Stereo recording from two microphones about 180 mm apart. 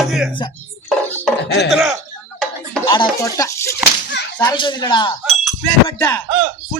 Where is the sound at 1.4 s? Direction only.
70° left (ahead or behind).